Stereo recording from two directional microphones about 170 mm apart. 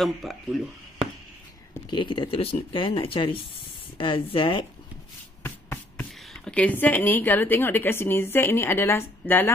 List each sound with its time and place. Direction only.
0.0 s speech: centre (ahead or behind)
1.9 s speech: 30° left (ahead or behind)
5.4 s speech: 10° left (ahead or behind)